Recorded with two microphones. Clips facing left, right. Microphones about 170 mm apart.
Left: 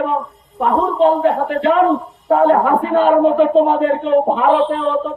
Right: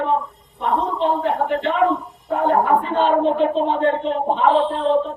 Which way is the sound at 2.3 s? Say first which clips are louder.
Left 6 dB; 80° left.